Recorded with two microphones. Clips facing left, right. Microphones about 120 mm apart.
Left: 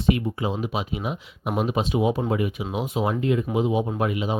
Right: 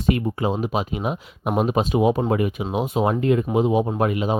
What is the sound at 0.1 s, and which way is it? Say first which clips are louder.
Speech: right 2 dB; 50° right (ahead or behind).